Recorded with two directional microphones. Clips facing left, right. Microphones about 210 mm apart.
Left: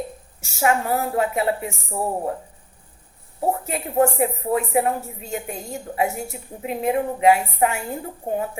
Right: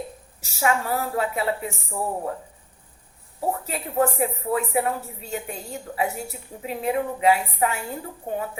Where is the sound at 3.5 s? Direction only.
40° left (ahead or behind).